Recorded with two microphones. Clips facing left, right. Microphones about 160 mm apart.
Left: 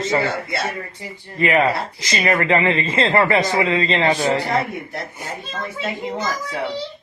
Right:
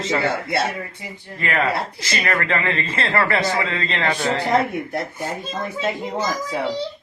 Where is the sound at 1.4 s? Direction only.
20° left (ahead or behind).